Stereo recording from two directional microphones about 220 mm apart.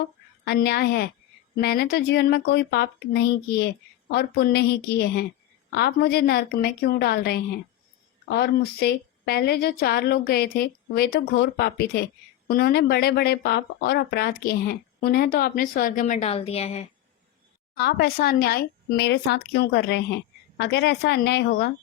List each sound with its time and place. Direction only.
0.4 s a woman's voice: 45° left (ahead or behind); by 16.8 s 25° left (ahead or behind)
17.8 s a woman's voice: 45° left (ahead or behind)